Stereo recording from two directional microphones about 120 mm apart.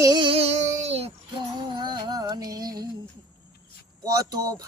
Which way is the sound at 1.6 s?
40° right (ahead or behind).